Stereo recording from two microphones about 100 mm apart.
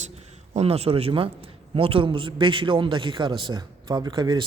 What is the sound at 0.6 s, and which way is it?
A man's voice, 90° right.